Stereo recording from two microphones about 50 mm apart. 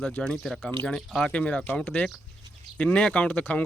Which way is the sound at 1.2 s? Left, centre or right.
Left.